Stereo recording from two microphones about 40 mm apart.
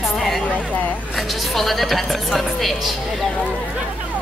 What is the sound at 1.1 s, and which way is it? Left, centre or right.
A woman's voice, centre.